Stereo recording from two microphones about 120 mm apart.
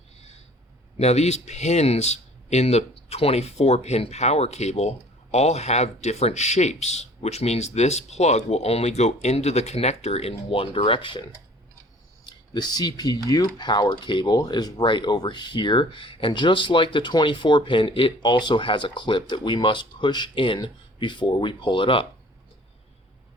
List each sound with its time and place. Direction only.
0.9 s speech: 60° left (ahead or behind); by 22.0 s 45° left (ahead or behind)